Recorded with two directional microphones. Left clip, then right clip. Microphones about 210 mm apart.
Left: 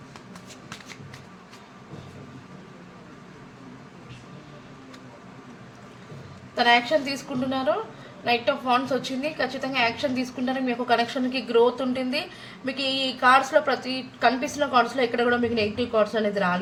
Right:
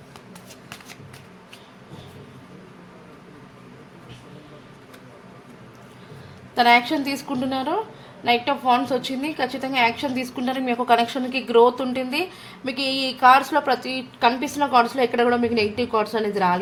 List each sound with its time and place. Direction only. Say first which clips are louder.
6.6 s a woman's voice: right 3 dB; 45° right (ahead or behind)